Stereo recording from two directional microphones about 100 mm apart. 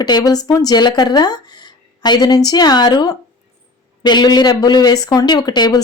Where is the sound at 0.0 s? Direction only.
45° left (ahead or behind).